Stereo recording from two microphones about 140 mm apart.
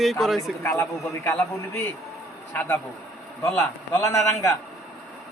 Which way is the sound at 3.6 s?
20° left (ahead or behind).